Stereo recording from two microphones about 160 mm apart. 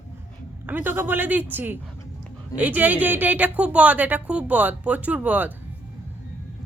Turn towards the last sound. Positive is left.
turn(degrees=-10)  # may be behind; listen again after turning